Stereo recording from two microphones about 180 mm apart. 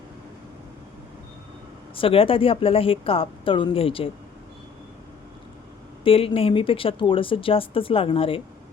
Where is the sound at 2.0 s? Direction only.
30° left (ahead or behind).